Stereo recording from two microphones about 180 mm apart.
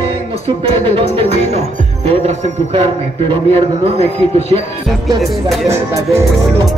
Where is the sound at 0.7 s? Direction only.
30° right (ahead or behind).